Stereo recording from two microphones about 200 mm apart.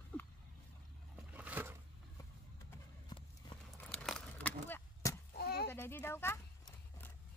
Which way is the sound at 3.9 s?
5° left (ahead or behind).